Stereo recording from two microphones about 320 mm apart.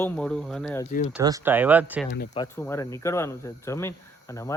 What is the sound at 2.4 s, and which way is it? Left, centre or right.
Speech, centre.